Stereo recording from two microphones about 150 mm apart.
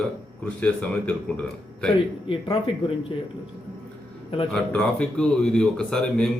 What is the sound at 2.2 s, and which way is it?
Speech, 35° left (ahead or behind).